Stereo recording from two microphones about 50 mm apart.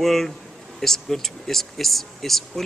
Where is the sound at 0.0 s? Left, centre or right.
Centre.